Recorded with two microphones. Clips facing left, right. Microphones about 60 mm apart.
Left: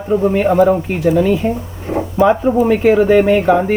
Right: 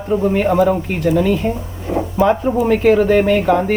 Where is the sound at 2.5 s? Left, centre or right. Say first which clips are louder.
Left 1 dB; centre.